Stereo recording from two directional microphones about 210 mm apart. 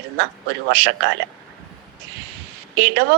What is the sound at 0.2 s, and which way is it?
Speech, 55° right (ahead or behind).